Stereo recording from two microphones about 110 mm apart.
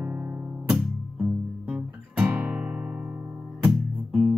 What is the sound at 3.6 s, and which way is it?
Music, 5° right (ahead or behind).